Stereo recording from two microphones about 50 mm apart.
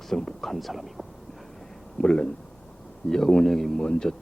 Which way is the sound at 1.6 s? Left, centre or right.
Centre.